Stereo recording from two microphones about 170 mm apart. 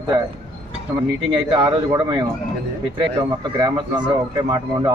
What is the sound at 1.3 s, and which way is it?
Speech, 25° right (ahead or behind).